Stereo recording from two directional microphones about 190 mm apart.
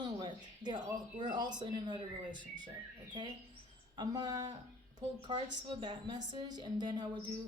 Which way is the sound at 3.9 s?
20° right (ahead or behind).